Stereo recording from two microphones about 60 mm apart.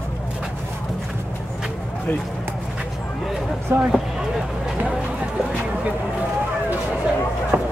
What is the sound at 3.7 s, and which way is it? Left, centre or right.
Speech, right.